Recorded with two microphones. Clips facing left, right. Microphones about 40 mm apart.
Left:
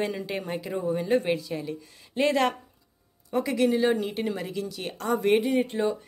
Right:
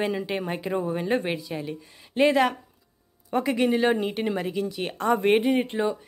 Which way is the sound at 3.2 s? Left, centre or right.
Right.